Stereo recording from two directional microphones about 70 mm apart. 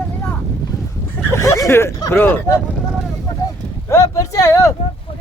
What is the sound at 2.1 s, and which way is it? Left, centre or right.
Speech, left.